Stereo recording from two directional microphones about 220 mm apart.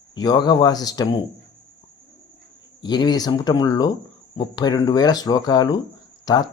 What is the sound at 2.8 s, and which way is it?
Speech, 20° left (ahead or behind).